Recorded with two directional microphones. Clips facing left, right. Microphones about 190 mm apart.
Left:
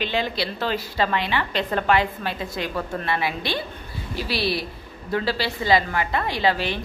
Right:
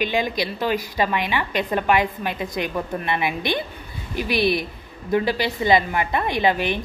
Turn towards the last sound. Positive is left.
turn(degrees=-20)  # may be behind; listen again after turning